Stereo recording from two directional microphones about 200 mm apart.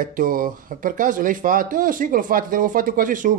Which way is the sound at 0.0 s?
45° right (ahead or behind).